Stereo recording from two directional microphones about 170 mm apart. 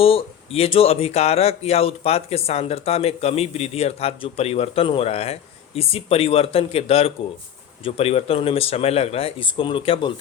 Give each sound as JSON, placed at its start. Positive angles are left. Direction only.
{"t": 0.0, "sound": "speech", "side_deg": 35}